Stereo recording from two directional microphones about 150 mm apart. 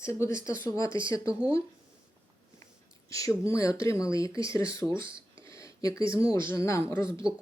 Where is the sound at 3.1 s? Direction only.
20° left (ahead or behind).